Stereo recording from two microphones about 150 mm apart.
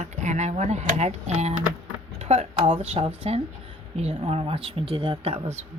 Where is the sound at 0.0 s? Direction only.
50° right (ahead or behind).